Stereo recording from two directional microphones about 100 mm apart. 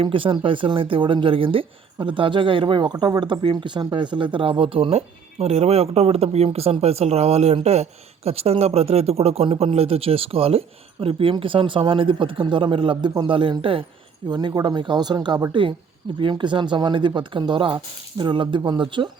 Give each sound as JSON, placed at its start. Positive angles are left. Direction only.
{"t": 0.0, "sound": "speech", "side_deg": -60}
{"t": 14.3, "sound": "speech", "side_deg": -45}